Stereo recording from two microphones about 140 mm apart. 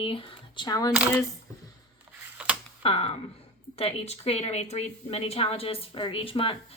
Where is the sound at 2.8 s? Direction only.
45° left (ahead or behind).